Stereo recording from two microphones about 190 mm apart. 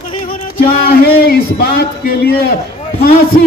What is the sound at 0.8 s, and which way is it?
A man's voice, 55° left (ahead or behind).